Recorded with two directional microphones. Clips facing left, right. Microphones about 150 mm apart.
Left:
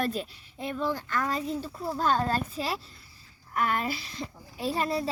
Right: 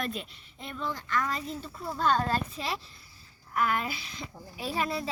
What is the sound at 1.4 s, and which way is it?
Speech, 5° left (ahead or behind).